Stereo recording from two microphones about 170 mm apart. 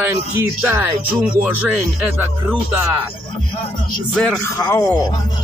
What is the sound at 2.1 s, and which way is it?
Speech, 15° right (ahead or behind).